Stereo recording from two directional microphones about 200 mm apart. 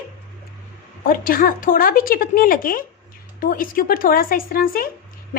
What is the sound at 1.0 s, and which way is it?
A woman's voice, 45° left (ahead or behind).